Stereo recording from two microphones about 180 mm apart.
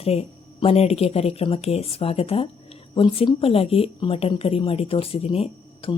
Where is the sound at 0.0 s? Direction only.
35° left (ahead or behind).